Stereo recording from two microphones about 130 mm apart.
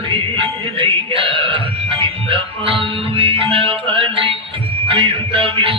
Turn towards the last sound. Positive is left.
turn(degrees=-45)  # may be behind; listen again after turning